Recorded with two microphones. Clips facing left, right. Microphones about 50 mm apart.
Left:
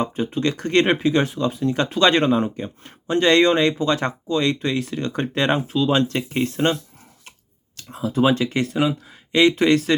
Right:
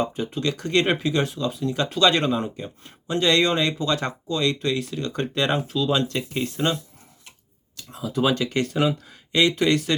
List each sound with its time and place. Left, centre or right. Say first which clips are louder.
0.0 s speech: left 3 dB; left
8.1 s speech: left 3 dB; left; by 9.1 s centre
9.3 s speech: left 4 dB; left